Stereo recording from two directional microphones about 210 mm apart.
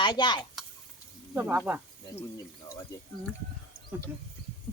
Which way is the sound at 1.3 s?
5° right (ahead or behind).